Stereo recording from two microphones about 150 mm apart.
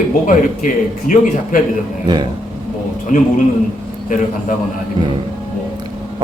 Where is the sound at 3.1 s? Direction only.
60° left (ahead or behind).